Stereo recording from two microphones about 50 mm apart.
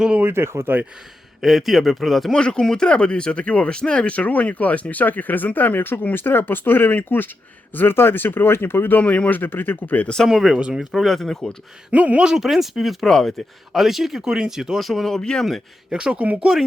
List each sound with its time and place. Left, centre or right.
0.2 s speech: right
1.4 s speech: centre
2.3 s speech: centre; by 9.0 s left
9.0 s speech: left
10.2 s speech: centre
10.6 s speech: centre
10.9 s speech: centre
11.9 s speech: right
12.4 s speech: centre
14.8 s speech: centre
15.9 s speech: centre